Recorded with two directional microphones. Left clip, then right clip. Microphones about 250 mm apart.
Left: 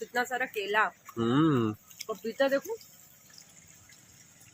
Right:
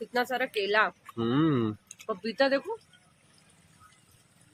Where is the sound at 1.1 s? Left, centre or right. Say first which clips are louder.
Left 1 dB; centre.